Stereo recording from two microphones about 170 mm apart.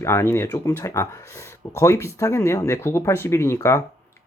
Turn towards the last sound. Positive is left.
turn(degrees=15)  # may be behind; listen again after turning